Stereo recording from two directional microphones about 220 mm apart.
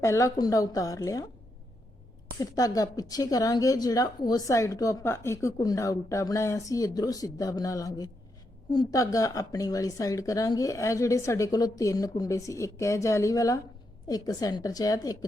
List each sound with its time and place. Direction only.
0.0 s a woman's voice: 15° left (ahead or behind)
2.4 s a woman's voice: 15° left (ahead or behind)